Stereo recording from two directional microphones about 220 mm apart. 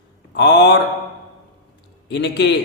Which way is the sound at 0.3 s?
50° left (ahead or behind).